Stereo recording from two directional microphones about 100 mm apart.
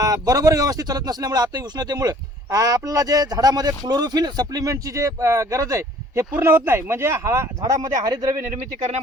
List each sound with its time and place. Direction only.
0.0 s speech: 35° right (ahead or behind)